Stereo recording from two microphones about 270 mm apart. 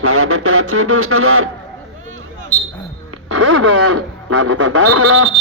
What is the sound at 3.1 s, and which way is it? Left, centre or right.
Music, right.